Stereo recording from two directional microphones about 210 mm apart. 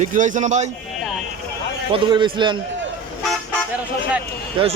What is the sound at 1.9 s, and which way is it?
Speech, 25° right (ahead or behind).